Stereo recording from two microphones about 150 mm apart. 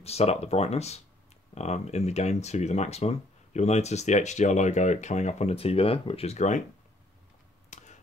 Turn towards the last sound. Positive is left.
turn(degrees=50)  # may be behind; listen again after turning